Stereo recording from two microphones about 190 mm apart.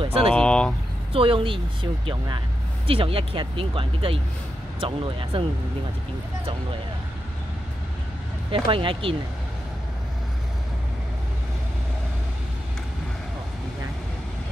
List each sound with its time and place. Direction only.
0.0 s speech: 30° right (ahead or behind)
0.3 s vehicle: 5° left (ahead or behind)
1.1 s speech: 30° right (ahead or behind)
8.5 s speech: 25° right (ahead or behind)